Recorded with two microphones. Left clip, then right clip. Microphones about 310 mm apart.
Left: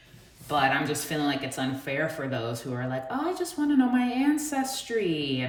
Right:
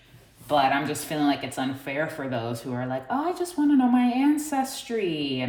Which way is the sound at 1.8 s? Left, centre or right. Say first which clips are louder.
Even; right.